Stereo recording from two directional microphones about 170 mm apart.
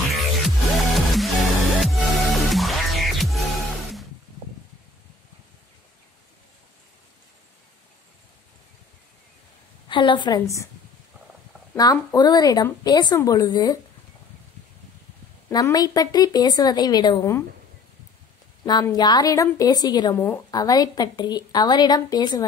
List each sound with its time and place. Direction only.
0.4 s music: centre (ahead or behind)
9.8 s a woman's voice: 30° left (ahead or behind)
11.7 s a woman's voice: 20° left (ahead or behind)
15.5 s a woman's voice: 20° left (ahead or behind)
18.7 s a woman's voice: 25° left (ahead or behind)